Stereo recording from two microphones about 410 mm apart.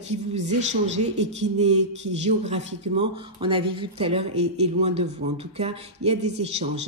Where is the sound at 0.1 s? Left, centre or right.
Centre.